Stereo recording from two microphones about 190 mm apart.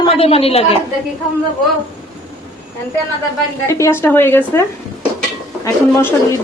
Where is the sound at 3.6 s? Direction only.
15° left (ahead or behind).